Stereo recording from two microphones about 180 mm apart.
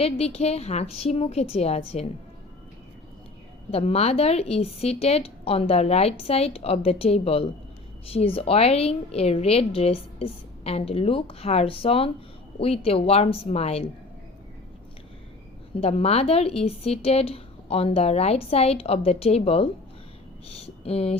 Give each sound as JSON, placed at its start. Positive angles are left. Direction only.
{"t": 0.0, "sound": "a woman's voice", "side_deg": 35}
{"t": 3.7, "sound": "a woman's voice", "side_deg": 35}
{"t": 15.7, "sound": "a woman's voice", "side_deg": 35}